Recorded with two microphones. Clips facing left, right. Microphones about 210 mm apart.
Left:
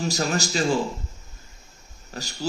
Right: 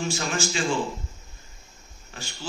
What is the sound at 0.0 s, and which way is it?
Speech, 40° left (ahead or behind).